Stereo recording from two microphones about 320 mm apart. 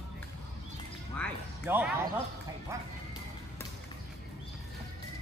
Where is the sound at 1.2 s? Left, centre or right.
Centre.